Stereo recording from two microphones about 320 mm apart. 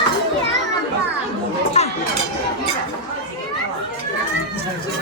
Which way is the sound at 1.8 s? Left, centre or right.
Centre.